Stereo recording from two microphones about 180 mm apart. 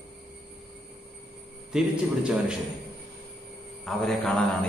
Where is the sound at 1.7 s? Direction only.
5° right (ahead or behind).